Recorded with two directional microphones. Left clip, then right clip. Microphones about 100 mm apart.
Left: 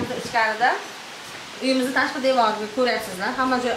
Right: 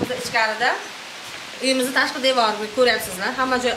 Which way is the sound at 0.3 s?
20° right (ahead or behind).